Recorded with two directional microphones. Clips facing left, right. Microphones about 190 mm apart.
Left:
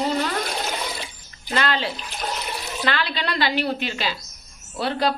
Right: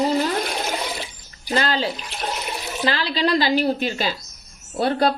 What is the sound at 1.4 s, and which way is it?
A woman's voice, 35° right (ahead or behind).